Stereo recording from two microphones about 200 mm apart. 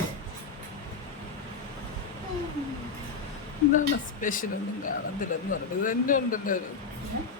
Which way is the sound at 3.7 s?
40° left (ahead or behind).